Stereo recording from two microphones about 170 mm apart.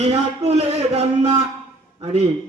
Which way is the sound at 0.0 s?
40° right (ahead or behind).